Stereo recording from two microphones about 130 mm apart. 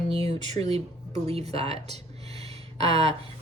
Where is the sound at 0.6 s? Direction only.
55° right (ahead or behind).